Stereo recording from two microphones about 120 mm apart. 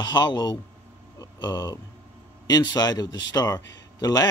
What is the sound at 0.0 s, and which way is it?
A man's voice, 35° left (ahead or behind).